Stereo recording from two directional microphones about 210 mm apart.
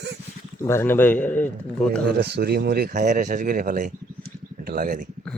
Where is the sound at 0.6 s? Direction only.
10° left (ahead or behind).